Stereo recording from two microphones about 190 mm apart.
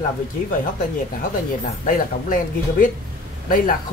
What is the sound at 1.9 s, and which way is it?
A man's voice, 45° left (ahead or behind).